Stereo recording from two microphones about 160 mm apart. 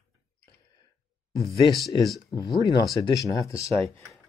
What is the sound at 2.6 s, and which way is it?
Speech, 25° left (ahead or behind).